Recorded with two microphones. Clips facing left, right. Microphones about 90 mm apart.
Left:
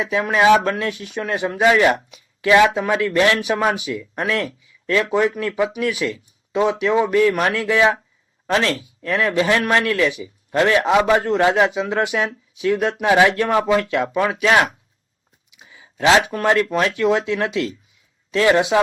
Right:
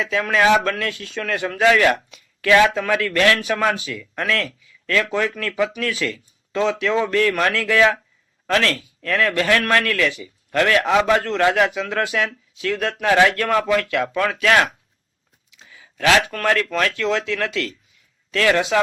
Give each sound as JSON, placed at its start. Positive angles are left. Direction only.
{"t": 0.0, "sound": "a man's voice", "side_deg": 20}